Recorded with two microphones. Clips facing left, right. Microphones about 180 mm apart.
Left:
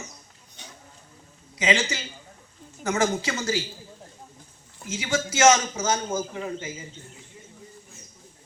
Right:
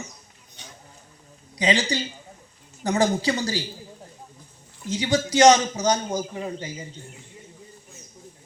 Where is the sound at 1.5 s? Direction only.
35° right (ahead or behind).